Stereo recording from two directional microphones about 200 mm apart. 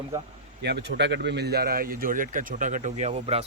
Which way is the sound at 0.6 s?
60° right (ahead or behind).